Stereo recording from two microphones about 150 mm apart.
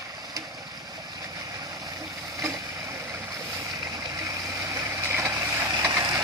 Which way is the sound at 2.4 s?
20° right (ahead or behind).